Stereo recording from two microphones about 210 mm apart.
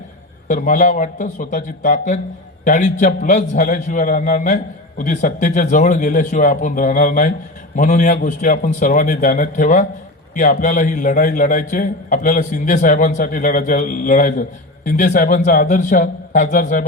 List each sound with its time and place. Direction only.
0.4 s a man's voice: 35° left (ahead or behind)